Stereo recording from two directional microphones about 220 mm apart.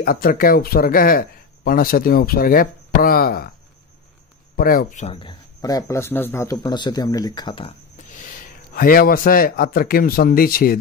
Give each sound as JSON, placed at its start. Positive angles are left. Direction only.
{"t": 0.0, "sound": "speech", "side_deg": 40}
{"t": 4.6, "sound": "speech", "side_deg": 40}
{"t": 8.1, "sound": "a man's voice", "side_deg": 35}